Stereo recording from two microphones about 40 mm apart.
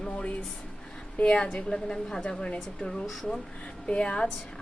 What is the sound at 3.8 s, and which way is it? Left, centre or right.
Speech, left.